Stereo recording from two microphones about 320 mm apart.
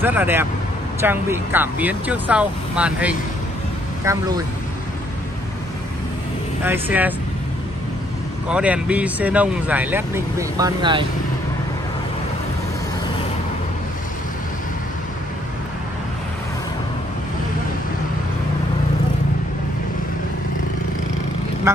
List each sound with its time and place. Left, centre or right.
0.0 s speech: centre
6.6 s speech: centre
8.5 s speech: centre
21.7 s speech: centre